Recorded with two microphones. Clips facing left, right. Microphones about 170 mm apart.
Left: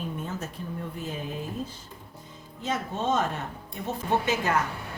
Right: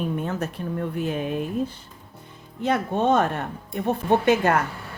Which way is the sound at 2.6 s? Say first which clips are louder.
Right 7 dB; 60° right (ahead or behind).